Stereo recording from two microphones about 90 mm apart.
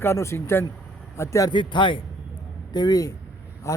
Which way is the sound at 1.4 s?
60° left (ahead or behind).